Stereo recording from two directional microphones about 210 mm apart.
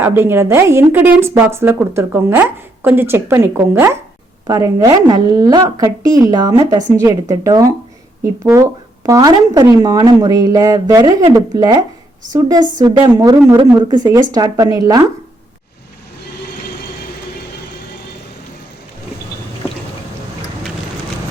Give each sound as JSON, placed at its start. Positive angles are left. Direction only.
{"t": 0.0, "sound": "speech", "side_deg": -10}